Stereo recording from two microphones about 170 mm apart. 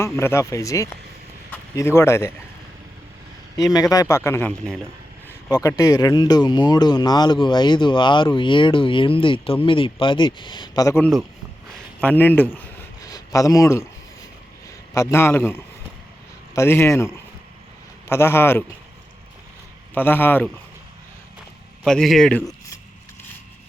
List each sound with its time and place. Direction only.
0.0 s a man's voice: 15° left (ahead or behind)
3.6 s a man's voice: 20° left (ahead or behind); by 4.9 s 5° left (ahead or behind)
5.5 s speech: 20° left (ahead or behind)
11.0 s a man's voice: centre (ahead or behind)
11.9 s a man's voice: 10° left (ahead or behind)
13.0 s a sound: 20° left (ahead or behind)
14.9 s a man's voice: 15° left (ahead or behind)
18.1 s a man's voice: 15° left (ahead or behind)
19.9 s a man's voice: 10° left (ahead or behind)
21.8 s a man's voice: 5° left (ahead or behind)